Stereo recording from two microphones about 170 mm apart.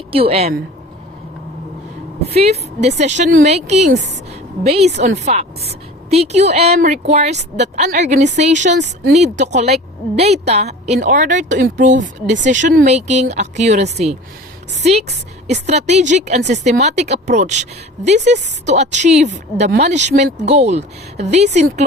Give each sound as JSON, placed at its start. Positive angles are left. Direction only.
{"t": 0.1, "sound": "speech", "side_deg": -35}
{"t": 2.3, "sound": "a woman's voice", "side_deg": -35}
{"t": 3.9, "sound": "a woman's voice", "side_deg": -90}
{"t": 4.3, "sound": "a woman's voice", "side_deg": -40}